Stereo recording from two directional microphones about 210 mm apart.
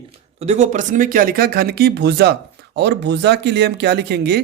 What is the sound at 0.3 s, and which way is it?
Speech, 30° right (ahead or behind).